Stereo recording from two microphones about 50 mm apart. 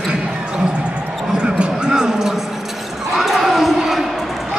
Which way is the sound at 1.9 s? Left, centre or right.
Centre.